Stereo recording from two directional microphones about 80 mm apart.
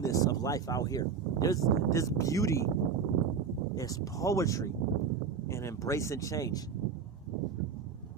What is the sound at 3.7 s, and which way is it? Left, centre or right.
Speech, left.